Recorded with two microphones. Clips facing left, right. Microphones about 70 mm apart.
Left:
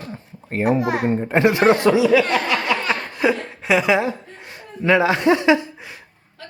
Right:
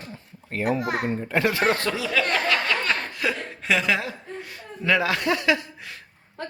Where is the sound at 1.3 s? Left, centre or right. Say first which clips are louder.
Left 7 dB; left; by 2.5 s centre.